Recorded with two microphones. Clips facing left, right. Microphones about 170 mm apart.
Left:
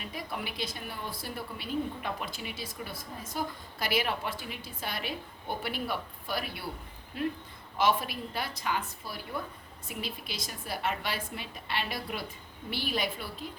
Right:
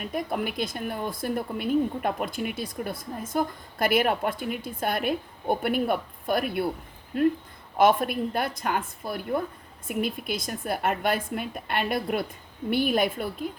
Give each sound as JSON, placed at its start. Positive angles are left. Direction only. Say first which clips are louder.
{"t": 0.0, "sound": "speech", "louder": "right 9 dB", "side_deg": -50}